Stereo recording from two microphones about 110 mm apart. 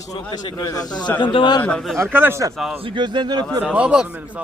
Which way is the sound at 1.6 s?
10° left (ahead or behind).